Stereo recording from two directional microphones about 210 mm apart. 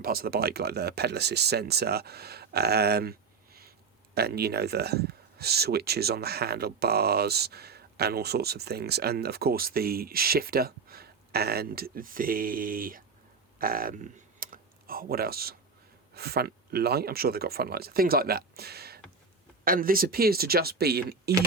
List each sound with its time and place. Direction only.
0.0 s speech: 45° right (ahead or behind)
13.6 s computer keyboard: 45° right (ahead or behind)
16.1 s speech: 50° right (ahead or behind)